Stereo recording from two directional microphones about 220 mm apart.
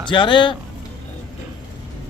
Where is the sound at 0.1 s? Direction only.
20° left (ahead or behind).